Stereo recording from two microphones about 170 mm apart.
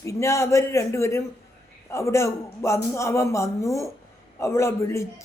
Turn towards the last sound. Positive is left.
turn(degrees=15)  # may be behind; listen again after turning